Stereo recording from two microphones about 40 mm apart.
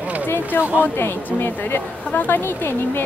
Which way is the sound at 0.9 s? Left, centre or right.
Left.